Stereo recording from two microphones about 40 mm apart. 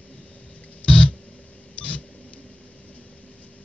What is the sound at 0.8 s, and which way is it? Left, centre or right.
Music, left.